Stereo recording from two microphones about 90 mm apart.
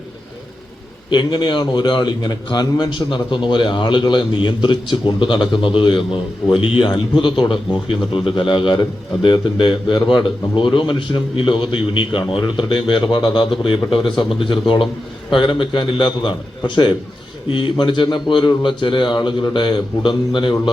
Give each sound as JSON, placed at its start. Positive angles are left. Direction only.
{"t": 1.1, "sound": "a man's voice", "side_deg": 60}